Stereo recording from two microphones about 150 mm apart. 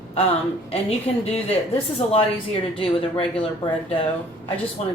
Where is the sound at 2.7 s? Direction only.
35° left (ahead or behind).